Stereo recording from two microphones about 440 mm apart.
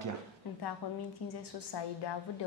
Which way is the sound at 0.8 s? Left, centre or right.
Left.